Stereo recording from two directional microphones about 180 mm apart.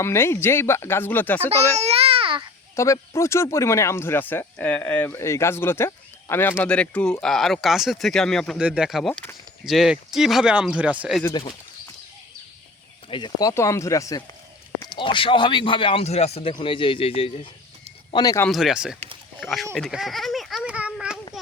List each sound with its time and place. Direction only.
0.0 s speech: 15° left (ahead or behind)
1.7 s babbling: 35° right (ahead or behind)
2.7 s speech: 15° left (ahead or behind); by 11.2 s 5° right (ahead or behind)
11.2 s speech: 20° left (ahead or behind)
13.1 s speech: 25° left (ahead or behind)
13.5 s speech: 15° left (ahead or behind); by 17.5 s 35° left (ahead or behind)
18.1 s speech: 20° left (ahead or behind)
18.4 s speech: centre (ahead or behind)
19.7 s a sound: centre (ahead or behind)